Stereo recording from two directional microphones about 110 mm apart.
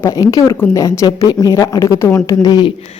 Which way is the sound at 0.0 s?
35° left (ahead or behind).